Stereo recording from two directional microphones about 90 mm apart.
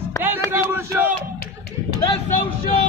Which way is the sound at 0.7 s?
20° right (ahead or behind).